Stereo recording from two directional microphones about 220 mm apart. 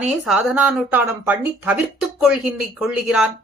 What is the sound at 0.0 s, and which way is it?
A woman's voice, centre (ahead or behind).